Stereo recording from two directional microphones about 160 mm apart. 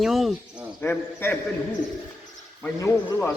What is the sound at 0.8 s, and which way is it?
Speech, 15° left (ahead or behind).